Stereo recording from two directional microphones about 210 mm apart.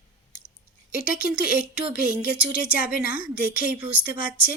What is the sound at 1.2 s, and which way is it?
Speech, 5° right (ahead or behind).